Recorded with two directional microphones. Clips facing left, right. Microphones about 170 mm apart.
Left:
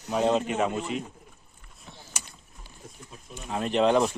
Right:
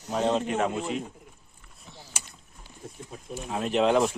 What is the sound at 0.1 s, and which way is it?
Speech, 5° left (ahead or behind).